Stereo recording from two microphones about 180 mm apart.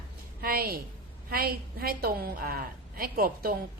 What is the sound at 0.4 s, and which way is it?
A woman's voice, 55° right (ahead or behind).